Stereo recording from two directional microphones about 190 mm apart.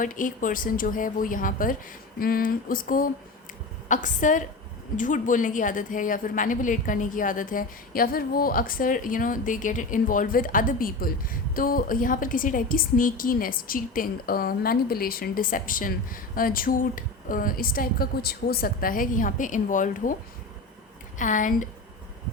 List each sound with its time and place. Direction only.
0.0 s a woman's voice: 45° left (ahead or behind)
21.2 s a woman's voice: 45° left (ahead or behind)